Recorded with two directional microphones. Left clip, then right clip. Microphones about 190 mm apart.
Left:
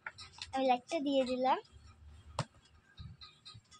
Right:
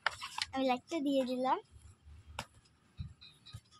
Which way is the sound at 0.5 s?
25° right (ahead or behind).